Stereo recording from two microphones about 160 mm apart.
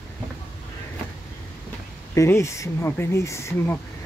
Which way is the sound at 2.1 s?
20° left (ahead or behind).